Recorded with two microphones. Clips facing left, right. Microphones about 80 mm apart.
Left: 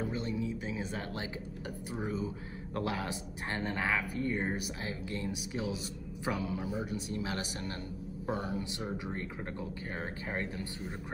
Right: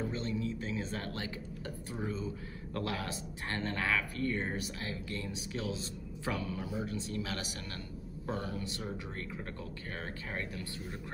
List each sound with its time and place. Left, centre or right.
0.0 s speech: centre